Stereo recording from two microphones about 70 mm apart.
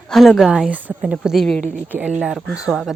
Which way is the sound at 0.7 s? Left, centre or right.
Right.